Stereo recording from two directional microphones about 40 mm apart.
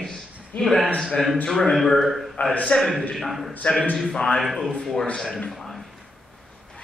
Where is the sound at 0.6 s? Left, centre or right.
Centre.